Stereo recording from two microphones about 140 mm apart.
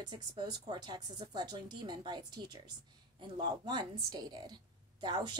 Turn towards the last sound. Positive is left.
turn(degrees=-30)  # may be behind; listen again after turning